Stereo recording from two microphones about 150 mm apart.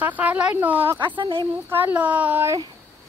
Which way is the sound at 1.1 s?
30° right (ahead or behind).